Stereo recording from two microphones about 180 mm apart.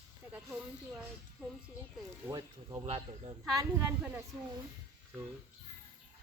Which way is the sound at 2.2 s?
20° right (ahead or behind).